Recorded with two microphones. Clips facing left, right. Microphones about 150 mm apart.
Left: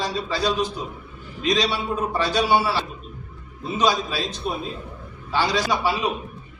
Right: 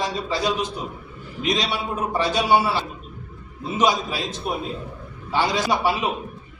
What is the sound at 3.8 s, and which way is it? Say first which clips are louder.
A man's voice: right 1 dB; 20° right (ahead or behind).